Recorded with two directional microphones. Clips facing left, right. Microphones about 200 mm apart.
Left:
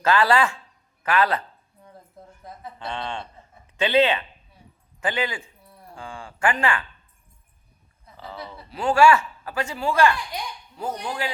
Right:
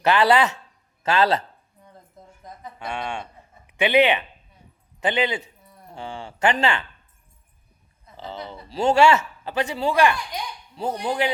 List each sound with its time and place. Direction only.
0.0 s a man's voice: 20° right (ahead or behind)
2.7 s a man's voice: 15° right (ahead or behind)
8.1 s a man's voice: 25° right (ahead or behind)